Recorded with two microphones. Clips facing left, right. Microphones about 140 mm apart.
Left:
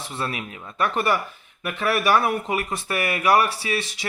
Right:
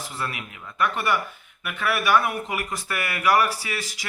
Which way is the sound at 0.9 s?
40° left (ahead or behind).